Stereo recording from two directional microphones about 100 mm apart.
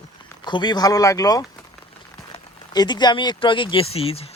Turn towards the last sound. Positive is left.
turn(degrees=80)